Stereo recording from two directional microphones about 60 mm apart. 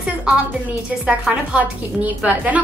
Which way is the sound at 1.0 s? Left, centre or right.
Centre.